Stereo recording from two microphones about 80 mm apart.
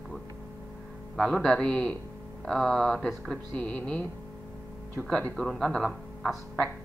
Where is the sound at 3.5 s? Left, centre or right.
Centre.